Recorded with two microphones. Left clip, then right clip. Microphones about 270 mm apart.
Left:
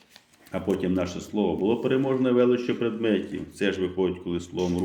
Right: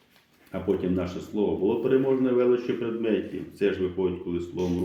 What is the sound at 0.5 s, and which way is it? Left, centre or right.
A man's voice, left.